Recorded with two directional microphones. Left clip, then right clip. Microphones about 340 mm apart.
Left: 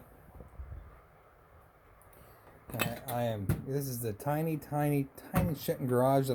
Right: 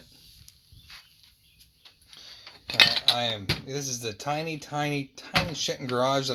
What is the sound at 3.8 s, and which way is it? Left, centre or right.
Speech, centre.